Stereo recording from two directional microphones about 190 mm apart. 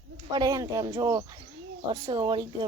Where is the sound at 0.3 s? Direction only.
20° right (ahead or behind).